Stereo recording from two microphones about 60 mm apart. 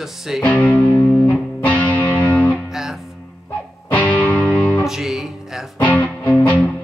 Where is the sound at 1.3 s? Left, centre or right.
Left.